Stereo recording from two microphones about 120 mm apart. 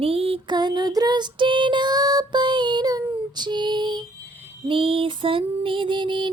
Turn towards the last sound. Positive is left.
turn(degrees=-40)  # may be behind; listen again after turning